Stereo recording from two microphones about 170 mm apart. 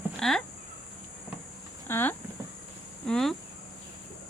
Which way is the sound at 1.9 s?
10° left (ahead or behind).